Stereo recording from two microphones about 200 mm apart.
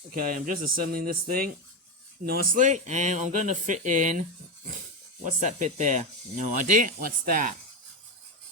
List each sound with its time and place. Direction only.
0.1 s speech: 45° right (ahead or behind)
5.2 s speech: 40° right (ahead or behind)